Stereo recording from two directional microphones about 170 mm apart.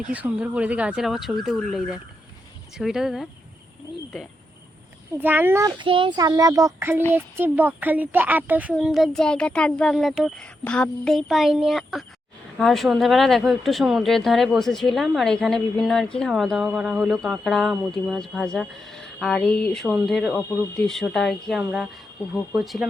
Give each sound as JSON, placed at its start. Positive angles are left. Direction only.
{"t": 0.1, "sound": "speech", "side_deg": -10}
{"t": 5.8, "sound": "a child's voice", "side_deg": -30}